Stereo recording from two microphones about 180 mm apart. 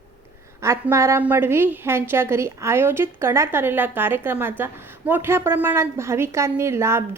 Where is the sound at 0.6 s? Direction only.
15° right (ahead or behind).